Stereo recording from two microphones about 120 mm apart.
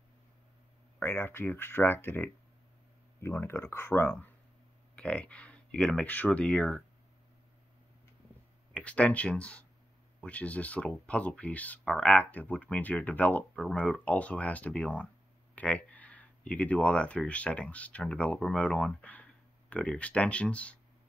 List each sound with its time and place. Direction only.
0.9 s speech: 15° left (ahead or behind)
8.7 s speech: 10° left (ahead or behind)